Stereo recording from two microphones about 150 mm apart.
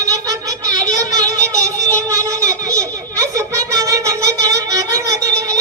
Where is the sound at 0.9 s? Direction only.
25° right (ahead or behind).